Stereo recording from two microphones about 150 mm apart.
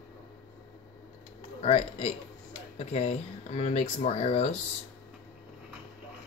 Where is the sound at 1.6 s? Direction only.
45° left (ahead or behind).